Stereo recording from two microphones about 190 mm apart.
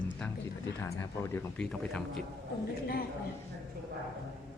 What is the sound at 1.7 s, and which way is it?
Speech, 5° left (ahead or behind).